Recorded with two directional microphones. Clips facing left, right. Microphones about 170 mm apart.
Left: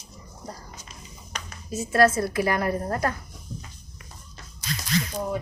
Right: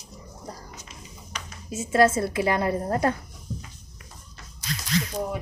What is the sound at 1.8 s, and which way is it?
A woman's voice, 20° right (ahead or behind).